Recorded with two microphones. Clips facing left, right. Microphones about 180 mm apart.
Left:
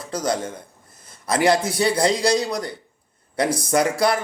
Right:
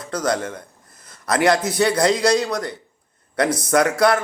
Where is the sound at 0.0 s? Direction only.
30° left (ahead or behind).